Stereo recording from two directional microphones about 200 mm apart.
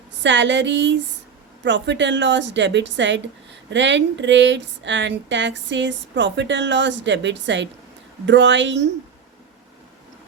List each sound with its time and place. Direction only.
0.2 s speech: 65° right (ahead or behind)